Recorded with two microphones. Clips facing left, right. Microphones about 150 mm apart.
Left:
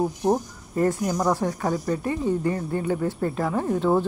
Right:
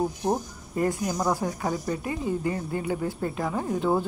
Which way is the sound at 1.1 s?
5° right (ahead or behind).